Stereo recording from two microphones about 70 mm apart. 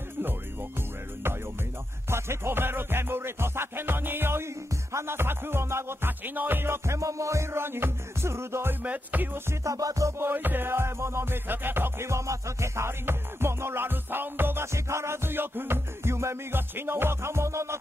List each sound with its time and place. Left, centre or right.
2.0 s music: right
8.8 s music: right
9.5 s music: right
10.1 s music: right